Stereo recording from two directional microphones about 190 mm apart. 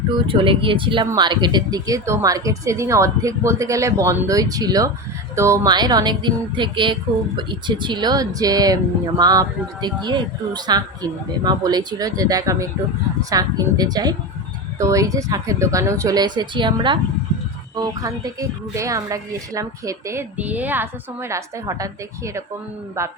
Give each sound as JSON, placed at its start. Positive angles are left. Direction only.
{"t": 0.3, "sound": "a woman's voice", "side_deg": -25}